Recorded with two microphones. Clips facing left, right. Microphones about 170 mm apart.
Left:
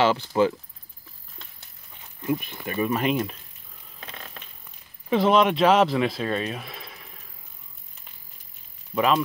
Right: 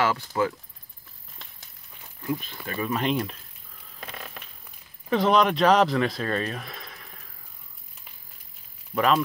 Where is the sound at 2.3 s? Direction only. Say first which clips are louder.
Left 3 dB; 20° left (ahead or behind).